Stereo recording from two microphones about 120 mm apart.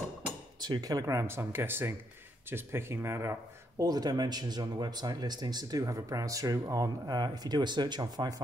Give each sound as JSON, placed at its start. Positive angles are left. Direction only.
{"t": 0.6, "sound": "speech", "side_deg": -35}